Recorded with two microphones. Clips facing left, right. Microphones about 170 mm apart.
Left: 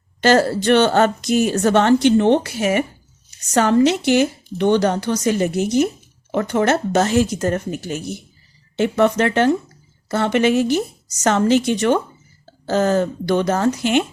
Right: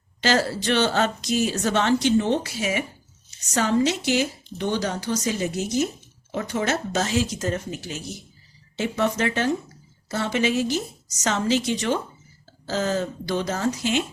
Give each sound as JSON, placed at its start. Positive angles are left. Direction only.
{"t": 0.2, "sound": "a woman's voice", "side_deg": 55}